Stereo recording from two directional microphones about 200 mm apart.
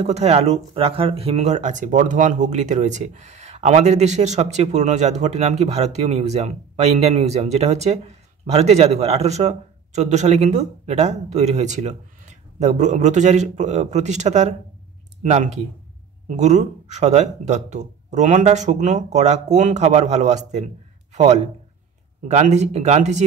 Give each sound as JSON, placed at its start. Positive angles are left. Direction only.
{"t": 0.0, "sound": "speech", "side_deg": -35}